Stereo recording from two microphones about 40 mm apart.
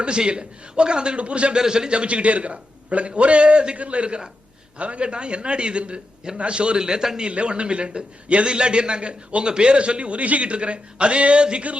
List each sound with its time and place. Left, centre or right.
0.0 s a man's voice: right
1.5 s a man's voice: centre
7.3 s a man's voice: right